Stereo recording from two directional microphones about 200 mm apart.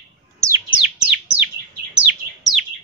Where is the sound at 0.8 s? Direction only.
5° right (ahead or behind).